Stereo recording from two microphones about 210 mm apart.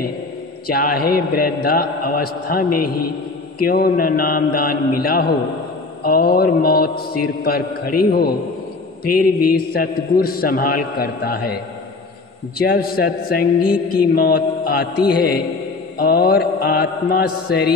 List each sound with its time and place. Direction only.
0.7 s a man's voice: 45° left (ahead or behind)